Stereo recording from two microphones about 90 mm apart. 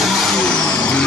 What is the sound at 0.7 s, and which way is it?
Vehicle, 15° left (ahead or behind).